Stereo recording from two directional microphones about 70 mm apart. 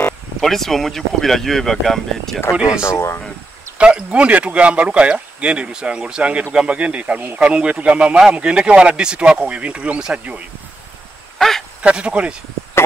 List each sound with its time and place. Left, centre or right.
0.4 s speech: centre
2.5 s speech: centre
2.8 s speech: left
3.7 s speech: centre
11.3 s a sound: centre
11.8 s speech: centre